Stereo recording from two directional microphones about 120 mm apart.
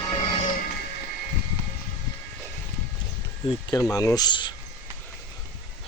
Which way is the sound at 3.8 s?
25° left (ahead or behind).